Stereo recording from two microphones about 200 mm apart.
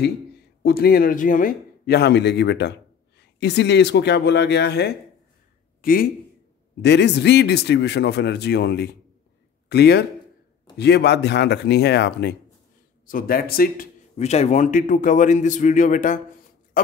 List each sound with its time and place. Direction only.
0.6 s a man's voice: 50° left (ahead or behind)
5.8 s a sound: 45° left (ahead or behind)
6.8 s speech: 60° left (ahead or behind)
13.0 s a man's voice: 45° left (ahead or behind)
14.1 s a man's voice: 35° left (ahead or behind)
16.8 s pig: 45° left (ahead or behind)